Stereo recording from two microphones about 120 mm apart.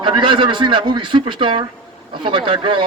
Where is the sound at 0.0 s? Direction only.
45° right (ahead or behind).